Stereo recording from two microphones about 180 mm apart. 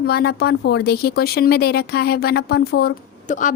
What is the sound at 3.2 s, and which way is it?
Speech, 45° left (ahead or behind).